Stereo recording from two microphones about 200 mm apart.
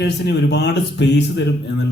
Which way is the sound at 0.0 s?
60° left (ahead or behind).